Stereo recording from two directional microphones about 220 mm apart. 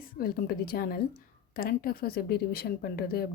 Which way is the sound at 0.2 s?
40° left (ahead or behind).